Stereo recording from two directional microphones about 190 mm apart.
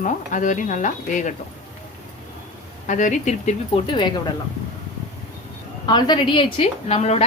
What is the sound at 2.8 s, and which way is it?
Speech, 40° left (ahead or behind).